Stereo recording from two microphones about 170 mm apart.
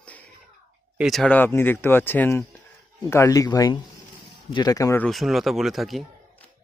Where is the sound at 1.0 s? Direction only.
Centre (ahead or behind); by 5.1 s 15° left (ahead or behind).